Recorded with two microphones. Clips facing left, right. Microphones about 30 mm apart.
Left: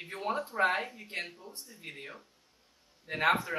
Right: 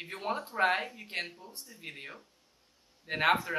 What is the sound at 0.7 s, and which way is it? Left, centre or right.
Speech, centre.